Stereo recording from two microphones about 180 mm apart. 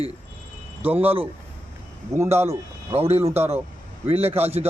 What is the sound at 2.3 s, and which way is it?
Speech, 15° right (ahead or behind).